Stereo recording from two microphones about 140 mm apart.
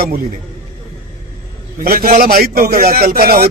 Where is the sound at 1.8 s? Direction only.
85° right.